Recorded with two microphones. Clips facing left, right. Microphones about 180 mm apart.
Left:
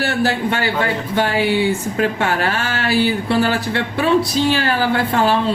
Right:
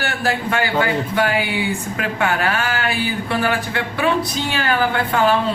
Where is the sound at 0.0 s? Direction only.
30° left (ahead or behind).